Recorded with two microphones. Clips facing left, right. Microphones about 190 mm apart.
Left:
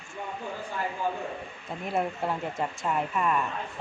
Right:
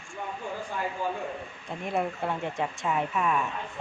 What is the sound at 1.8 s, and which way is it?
Speech, centre (ahead or behind).